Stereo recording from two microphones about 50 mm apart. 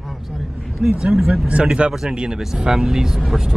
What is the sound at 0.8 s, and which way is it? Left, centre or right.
Speech, centre.